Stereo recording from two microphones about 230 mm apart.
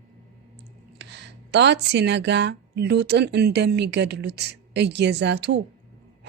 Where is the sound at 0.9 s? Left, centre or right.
Right.